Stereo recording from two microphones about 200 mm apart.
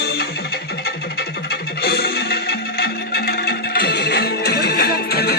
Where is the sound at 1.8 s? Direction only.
50° left (ahead or behind).